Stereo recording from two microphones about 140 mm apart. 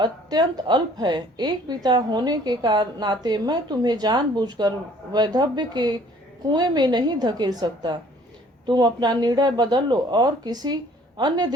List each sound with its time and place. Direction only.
0.0 s a woman's voice: 30° right (ahead or behind)